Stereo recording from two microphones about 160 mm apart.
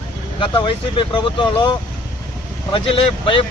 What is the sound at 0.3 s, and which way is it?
Speech, 30° left (ahead or behind).